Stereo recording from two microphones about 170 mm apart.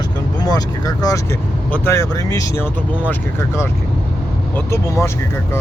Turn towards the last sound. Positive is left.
turn(degrees=15)  # may be behind; listen again after turning